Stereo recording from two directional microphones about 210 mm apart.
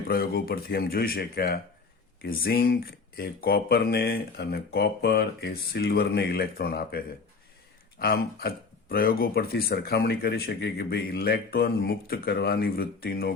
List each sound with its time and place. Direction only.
0.1 s speech: 45° left (ahead or behind)